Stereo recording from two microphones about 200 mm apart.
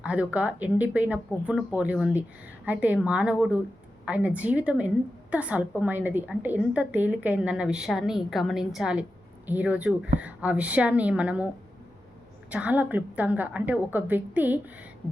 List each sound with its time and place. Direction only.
0.0 s a woman's voice: 5° right (ahead or behind)
12.5 s a woman's voice: 5° right (ahead or behind)